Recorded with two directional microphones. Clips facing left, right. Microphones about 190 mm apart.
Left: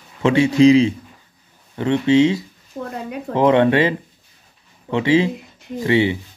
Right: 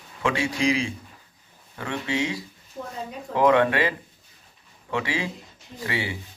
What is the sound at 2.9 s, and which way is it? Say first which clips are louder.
Speech: left 6 dB; 70° left (ahead or behind).